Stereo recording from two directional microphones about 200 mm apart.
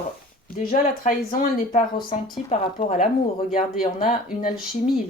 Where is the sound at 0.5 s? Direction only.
40° left (ahead or behind).